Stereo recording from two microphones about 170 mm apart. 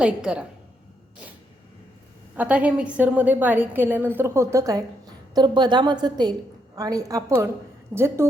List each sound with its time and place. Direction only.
0.0 s a woman's voice: 5° right (ahead or behind)
2.3 s a woman's voice: 10° right (ahead or behind)